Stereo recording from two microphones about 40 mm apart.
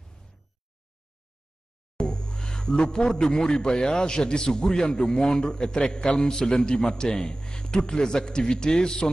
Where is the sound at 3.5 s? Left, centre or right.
Centre.